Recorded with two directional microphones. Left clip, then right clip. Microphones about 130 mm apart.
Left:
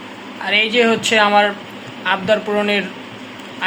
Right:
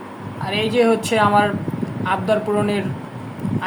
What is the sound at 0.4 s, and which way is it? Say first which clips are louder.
A man's voice: left 3 dB; centre (ahead or behind).